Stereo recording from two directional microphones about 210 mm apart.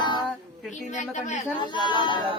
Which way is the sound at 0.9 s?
35° left (ahead or behind).